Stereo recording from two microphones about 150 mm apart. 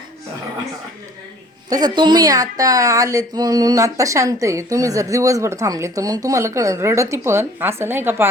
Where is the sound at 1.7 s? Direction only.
25° right (ahead or behind).